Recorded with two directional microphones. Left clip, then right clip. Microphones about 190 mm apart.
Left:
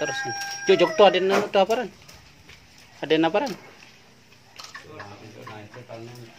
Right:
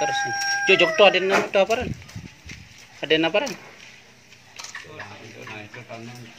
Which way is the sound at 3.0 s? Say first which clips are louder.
Right 1 dB; 20° left (ahead or behind).